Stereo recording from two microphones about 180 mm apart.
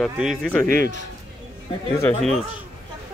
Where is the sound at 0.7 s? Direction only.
50° right (ahead or behind).